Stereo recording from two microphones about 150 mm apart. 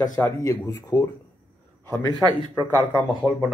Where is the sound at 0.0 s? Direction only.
20° left (ahead or behind).